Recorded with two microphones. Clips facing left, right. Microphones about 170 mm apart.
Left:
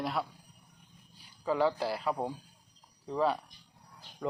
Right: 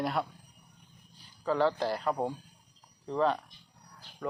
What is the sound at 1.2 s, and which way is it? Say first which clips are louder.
A man's voice: right 1 dB; 10° left (ahead or behind).